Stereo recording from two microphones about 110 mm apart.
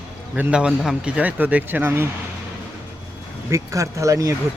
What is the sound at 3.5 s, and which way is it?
Speech, 30° right (ahead or behind).